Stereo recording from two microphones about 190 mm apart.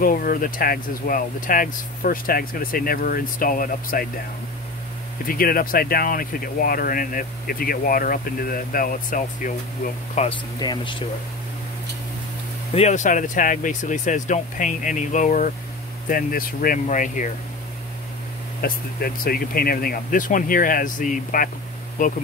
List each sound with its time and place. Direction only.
0.0 s speech: 45° left (ahead or behind)
5.2 s speech: 50° left (ahead or behind)
10.6 s speech: 25° left (ahead or behind)
12.7 s speech: 40° left (ahead or behind)
18.6 s speech: 50° left (ahead or behind)